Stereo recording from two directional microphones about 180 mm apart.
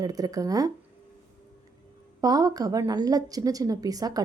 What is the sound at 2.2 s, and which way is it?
Speech, 20° right (ahead or behind).